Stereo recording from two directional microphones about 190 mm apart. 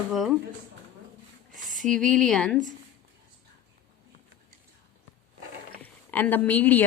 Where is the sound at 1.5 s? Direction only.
Centre (ahead or behind).